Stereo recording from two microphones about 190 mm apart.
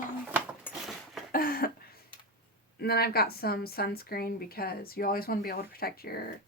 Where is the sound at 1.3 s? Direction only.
50° left (ahead or behind).